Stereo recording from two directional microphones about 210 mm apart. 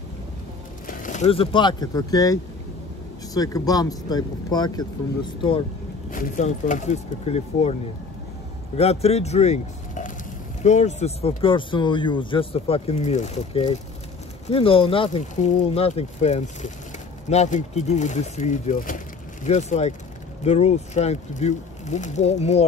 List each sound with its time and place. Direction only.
0.8 s speech: 35° left (ahead or behind); by 2.3 s 15° left (ahead or behind)
3.3 s speech: 15° left (ahead or behind)
6.1 s speech: 40° left (ahead or behind)
8.7 s speech: 30° left (ahead or behind)